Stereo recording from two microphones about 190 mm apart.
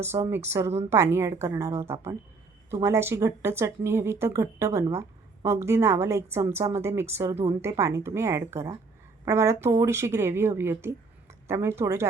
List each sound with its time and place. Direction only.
0.0 s speech: 15° right (ahead or behind)